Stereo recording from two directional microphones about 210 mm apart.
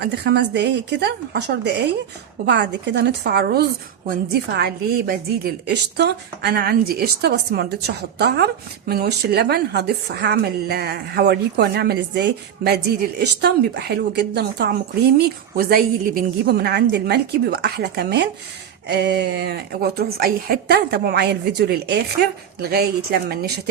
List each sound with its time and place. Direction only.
0.0 s a woman's voice: 50° right (ahead or behind)